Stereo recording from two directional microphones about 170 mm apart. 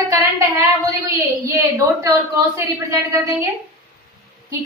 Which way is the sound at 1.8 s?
20° right (ahead or behind).